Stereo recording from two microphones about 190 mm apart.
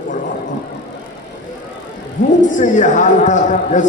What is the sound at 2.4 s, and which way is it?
A man's voice, 40° left (ahead or behind).